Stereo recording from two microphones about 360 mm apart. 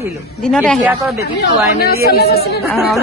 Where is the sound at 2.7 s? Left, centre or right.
Centre.